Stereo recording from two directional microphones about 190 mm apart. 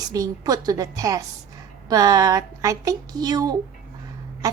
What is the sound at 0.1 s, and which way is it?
A woman's voice, 20° right (ahead or behind).